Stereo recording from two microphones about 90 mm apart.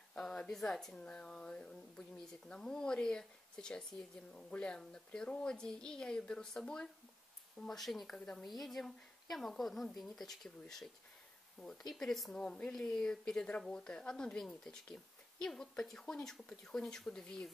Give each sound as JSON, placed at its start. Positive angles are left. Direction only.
{"t": 0.1, "sound": "a woman's voice", "side_deg": 10}